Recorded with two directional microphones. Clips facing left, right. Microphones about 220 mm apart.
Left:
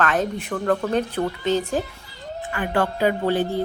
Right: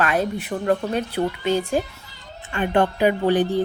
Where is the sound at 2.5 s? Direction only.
20° right (ahead or behind).